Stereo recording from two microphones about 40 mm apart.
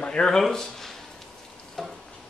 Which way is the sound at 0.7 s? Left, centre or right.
Centre.